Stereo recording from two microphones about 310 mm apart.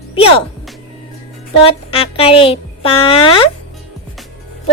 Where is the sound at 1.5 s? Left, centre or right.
Centre.